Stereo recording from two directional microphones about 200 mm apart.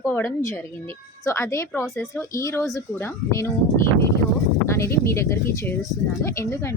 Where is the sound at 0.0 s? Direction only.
15° left (ahead or behind).